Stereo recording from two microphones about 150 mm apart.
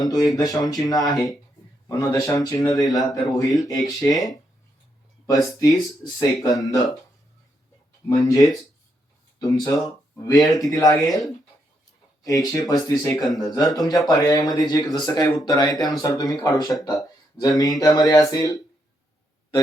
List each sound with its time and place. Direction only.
0.0 s speech: 25° left (ahead or behind)
8.2 s speech: 25° left (ahead or behind)
12.2 s speech: 25° left (ahead or behind)